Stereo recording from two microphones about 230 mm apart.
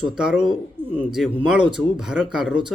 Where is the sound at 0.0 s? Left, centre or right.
Centre.